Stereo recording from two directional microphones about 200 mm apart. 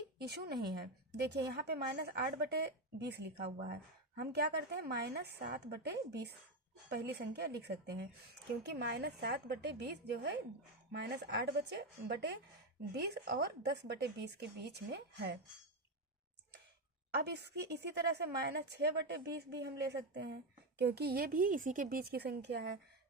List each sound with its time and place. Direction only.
0.2 s a woman's voice: 50° right (ahead or behind)
17.3 s a woman's voice: 55° right (ahead or behind)